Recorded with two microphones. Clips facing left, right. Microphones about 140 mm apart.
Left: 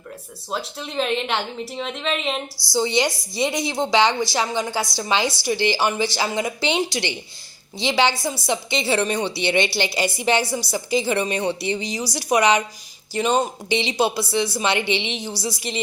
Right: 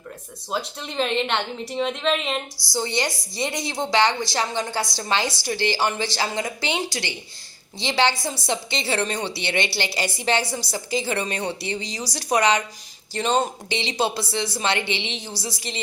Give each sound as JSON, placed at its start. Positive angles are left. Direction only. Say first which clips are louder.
{"t": 0.5, "sound": "a woman's voice", "louder": "left 1 dB", "side_deg": 0}
{"t": 2.7, "sound": "a woman's voice", "louder": "left 5 dB", "side_deg": 15}